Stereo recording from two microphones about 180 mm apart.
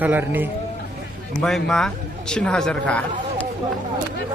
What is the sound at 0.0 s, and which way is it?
Speech, 10° right (ahead or behind).